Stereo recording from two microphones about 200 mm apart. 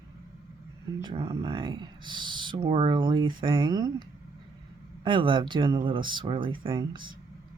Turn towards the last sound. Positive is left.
turn(degrees=-25)  # may be behind; listen again after turning